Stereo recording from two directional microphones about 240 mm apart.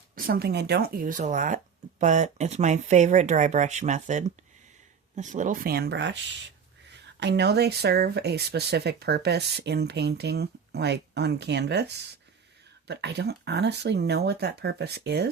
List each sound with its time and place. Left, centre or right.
0.2 s speech: right
7.2 s speech: right